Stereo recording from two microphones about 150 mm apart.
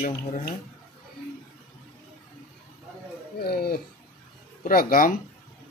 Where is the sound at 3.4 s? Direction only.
90° left.